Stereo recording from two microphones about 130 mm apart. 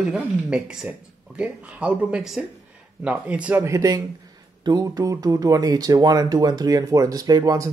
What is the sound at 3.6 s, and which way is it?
Speech, 25° right (ahead or behind).